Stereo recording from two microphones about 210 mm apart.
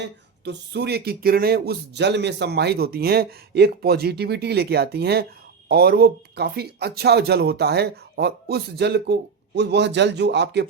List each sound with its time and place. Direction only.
0.4 s speech: 50° right (ahead or behind)